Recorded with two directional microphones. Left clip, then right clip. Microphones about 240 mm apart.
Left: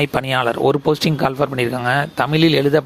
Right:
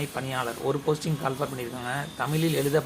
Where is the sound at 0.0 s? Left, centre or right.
Left.